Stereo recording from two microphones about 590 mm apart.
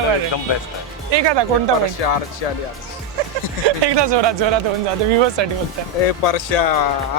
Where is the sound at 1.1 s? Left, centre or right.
Right.